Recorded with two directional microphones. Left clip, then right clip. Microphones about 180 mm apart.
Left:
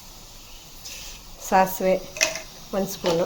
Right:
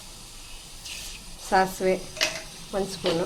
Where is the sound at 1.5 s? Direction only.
25° left (ahead or behind).